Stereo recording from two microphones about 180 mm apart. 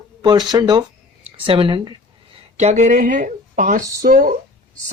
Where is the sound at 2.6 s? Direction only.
40° right (ahead or behind).